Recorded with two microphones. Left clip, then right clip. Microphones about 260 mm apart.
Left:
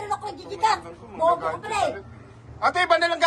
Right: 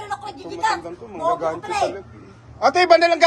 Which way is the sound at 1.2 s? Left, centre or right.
Right.